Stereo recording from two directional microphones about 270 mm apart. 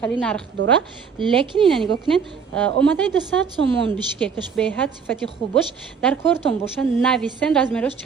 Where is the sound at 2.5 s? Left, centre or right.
Centre.